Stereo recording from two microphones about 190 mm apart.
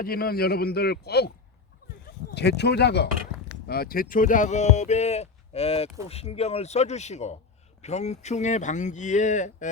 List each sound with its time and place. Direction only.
0.0 s a man's voice: 50° left (ahead or behind)
2.3 s a man's voice: 60° left (ahead or behind); by 9.6 s 40° left (ahead or behind)